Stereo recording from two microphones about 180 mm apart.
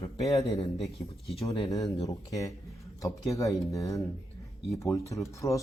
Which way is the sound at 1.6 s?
20° left (ahead or behind).